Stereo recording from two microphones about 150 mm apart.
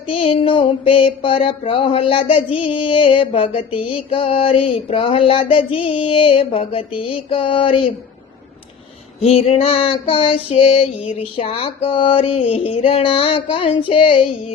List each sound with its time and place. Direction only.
0.1 s music: 40° left (ahead or behind)
9.2 s music: 40° left (ahead or behind)